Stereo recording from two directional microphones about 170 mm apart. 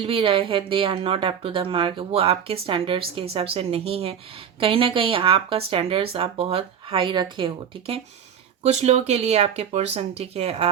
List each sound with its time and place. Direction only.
0.0 s a woman's voice: 30° right (ahead or behind)